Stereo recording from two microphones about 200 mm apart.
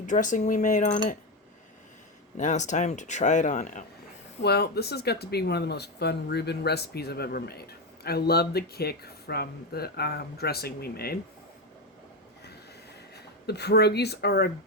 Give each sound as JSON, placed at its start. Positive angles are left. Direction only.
{"t": 0.1, "sound": "speech", "side_deg": 40}
{"t": 2.4, "sound": "speech", "side_deg": 35}
{"t": 4.4, "sound": "speech", "side_deg": 55}
{"t": 13.1, "sound": "speech", "side_deg": 55}